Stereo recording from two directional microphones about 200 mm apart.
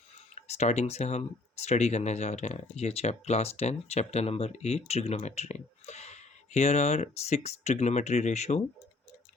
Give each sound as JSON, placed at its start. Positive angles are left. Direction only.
{"t": 0.3, "sound": "speech", "side_deg": 35}